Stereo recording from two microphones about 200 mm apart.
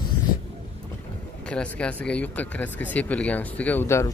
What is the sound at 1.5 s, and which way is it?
Speech, 5° left (ahead or behind).